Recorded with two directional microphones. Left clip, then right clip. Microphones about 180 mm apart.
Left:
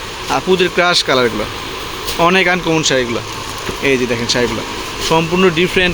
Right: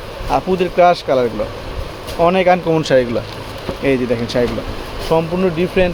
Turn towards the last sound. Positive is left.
turn(degrees=10)  # may be behind; listen again after turning